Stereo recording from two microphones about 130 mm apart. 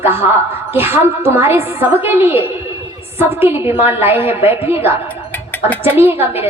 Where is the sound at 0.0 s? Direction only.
20° right (ahead or behind).